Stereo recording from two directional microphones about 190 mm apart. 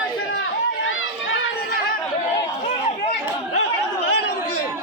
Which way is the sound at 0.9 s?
90° left.